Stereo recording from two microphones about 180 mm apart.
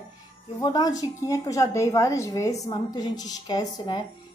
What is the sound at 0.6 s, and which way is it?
A woman's voice, 20° left (ahead or behind).